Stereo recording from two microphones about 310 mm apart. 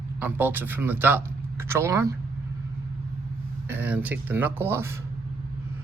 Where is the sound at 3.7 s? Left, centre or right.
Centre.